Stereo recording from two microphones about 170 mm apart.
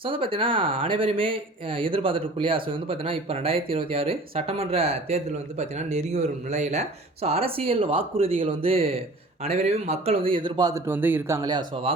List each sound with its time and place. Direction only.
0.0 s speech: 30° right (ahead or behind)